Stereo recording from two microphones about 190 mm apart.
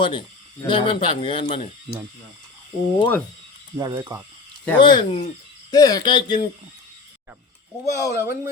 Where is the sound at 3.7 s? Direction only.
15° right (ahead or behind).